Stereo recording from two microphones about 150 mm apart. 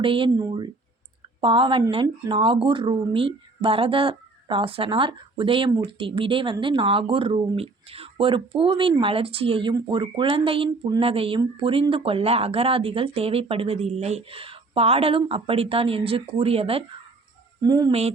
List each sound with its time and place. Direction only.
0.0 s a woman's voice: 35° right (ahead or behind)
17.6 s speech: 25° right (ahead or behind)